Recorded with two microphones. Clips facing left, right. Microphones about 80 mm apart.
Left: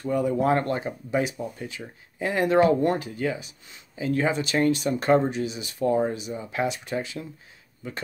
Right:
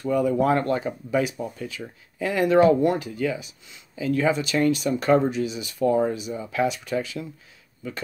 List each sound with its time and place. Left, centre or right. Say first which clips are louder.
0.0 s speech: right 2 dB; left